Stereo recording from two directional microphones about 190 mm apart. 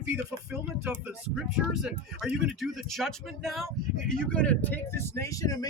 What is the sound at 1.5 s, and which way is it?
Speech, 5° right (ahead or behind).